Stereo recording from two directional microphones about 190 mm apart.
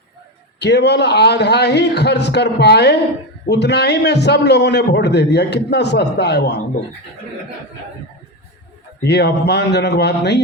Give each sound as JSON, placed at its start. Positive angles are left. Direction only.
{"t": 0.6, "sound": "a man's voice", "side_deg": 65}
{"t": 9.0, "sound": "a man's voice", "side_deg": 60}